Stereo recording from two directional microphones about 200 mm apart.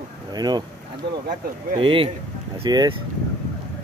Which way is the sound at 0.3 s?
20° right (ahead or behind).